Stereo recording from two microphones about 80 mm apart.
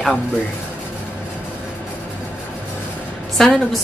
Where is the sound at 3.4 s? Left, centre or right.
Centre.